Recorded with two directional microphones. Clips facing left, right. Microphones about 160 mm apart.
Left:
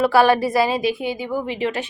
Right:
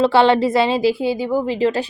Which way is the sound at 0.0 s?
25° right (ahead or behind).